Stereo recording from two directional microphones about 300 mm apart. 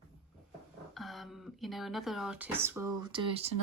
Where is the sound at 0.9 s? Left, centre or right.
Centre.